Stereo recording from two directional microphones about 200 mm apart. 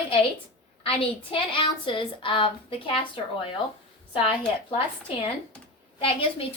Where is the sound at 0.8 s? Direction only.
25° left (ahead or behind).